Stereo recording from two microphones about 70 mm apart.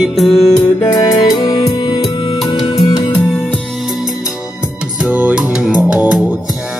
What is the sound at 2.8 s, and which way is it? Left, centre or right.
Music, left.